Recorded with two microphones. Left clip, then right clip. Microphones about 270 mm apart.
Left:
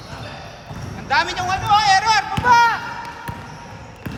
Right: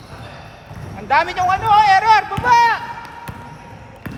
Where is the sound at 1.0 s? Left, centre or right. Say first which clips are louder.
Right 4 dB; right.